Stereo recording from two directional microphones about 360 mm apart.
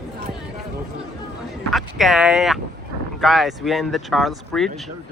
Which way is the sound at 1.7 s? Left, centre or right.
Centre.